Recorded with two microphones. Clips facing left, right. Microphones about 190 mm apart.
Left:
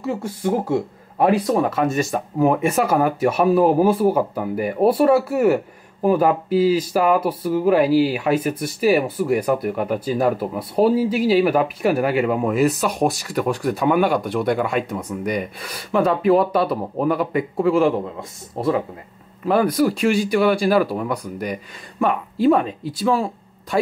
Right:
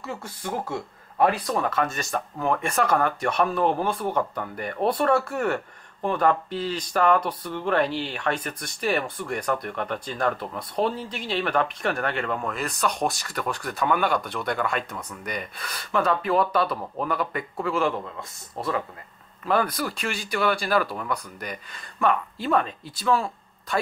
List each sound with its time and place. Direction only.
0.0 s speech: 10° left (ahead or behind)
18.6 s speech: 40° left (ahead or behind)
19.4 s speech: 10° left (ahead or behind)